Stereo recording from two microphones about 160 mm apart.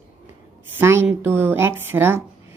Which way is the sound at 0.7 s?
15° right (ahead or behind).